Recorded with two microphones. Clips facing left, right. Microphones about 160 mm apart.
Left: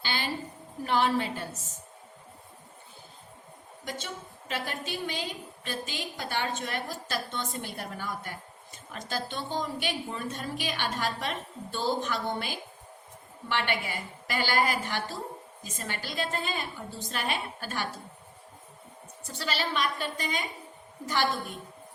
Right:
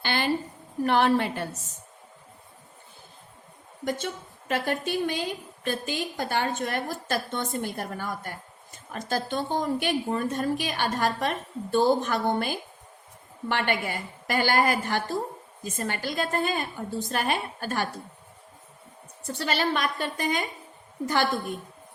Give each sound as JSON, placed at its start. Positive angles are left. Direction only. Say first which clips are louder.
{"t": 0.0, "sound": "a sound", "louder": "right 6 dB", "side_deg": -55}
{"t": 0.9, "sound": "a woman's voice", "louder": "right 4 dB", "side_deg": -60}
{"t": 3.8, "sound": "a woman's voice", "louder": "right 8 dB", "side_deg": -50}
{"t": 19.3, "sound": "a woman's voice", "louder": "right 5 dB", "side_deg": -50}